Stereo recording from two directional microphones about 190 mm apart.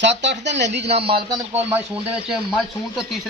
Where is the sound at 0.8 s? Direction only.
30° right (ahead or behind).